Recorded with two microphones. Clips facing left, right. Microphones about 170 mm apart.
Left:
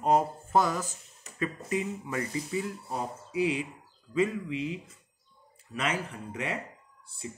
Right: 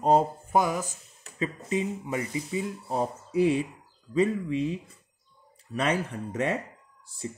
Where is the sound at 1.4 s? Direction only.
25° right (ahead or behind).